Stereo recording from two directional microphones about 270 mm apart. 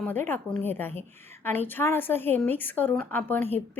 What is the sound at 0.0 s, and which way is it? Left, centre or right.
A woman's voice, centre.